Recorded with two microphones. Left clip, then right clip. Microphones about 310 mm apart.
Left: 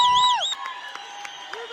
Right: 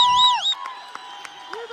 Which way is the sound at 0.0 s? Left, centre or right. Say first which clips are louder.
Right 2 dB; centre.